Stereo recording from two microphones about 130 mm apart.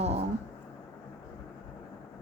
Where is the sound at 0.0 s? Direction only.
55° right (ahead or behind).